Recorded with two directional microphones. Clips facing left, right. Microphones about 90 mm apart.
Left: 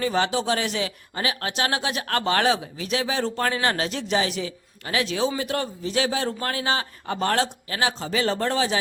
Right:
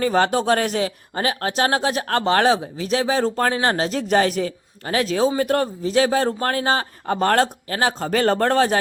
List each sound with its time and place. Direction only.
0.0 s speech: 45° right (ahead or behind)